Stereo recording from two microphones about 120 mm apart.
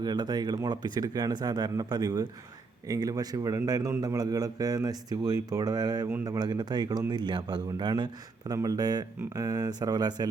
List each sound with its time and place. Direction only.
0.0 s speech: 35° right (ahead or behind)